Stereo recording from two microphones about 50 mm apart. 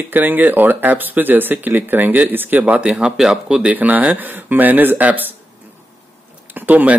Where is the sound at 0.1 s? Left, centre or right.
Right.